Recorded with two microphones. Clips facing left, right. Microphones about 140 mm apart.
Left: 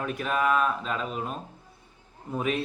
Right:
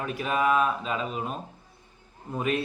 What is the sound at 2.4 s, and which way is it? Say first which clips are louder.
Speech: right 1 dB; centre (ahead or behind).